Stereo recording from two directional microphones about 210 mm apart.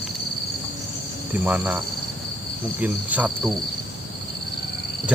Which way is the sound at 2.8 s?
5° right (ahead or behind).